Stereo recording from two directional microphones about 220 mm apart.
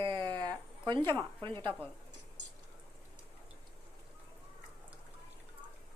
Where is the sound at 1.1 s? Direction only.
10° left (ahead or behind).